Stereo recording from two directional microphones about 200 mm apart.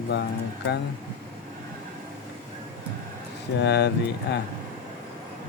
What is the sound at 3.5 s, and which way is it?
Speech, 60° left (ahead or behind).